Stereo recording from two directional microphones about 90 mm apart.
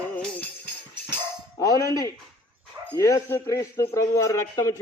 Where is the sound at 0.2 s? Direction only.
15° left (ahead or behind).